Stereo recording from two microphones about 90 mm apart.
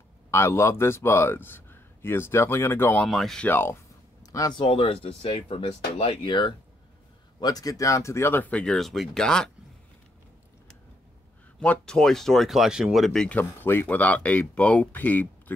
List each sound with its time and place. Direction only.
0.3 s a man's voice: 30° left (ahead or behind)
3.0 s speech: centre (ahead or behind)
3.4 s a man's voice: 25° left (ahead or behind)
4.2 s a sound: 40° left (ahead or behind)
4.6 s speech: 85° left; by 6.5 s 60° left (ahead or behind)
7.3 s speech: 45° left (ahead or behind); by 8.7 s 15° left (ahead or behind)
8.7 s speech: centre (ahead or behind)
11.6 s speech: 10° left (ahead or behind)
13.3 s speech: 20° left (ahead or behind)